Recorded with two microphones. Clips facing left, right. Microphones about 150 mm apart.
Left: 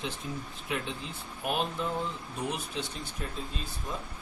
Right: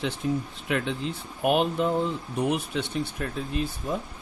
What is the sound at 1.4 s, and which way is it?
Speech, 70° right (ahead or behind).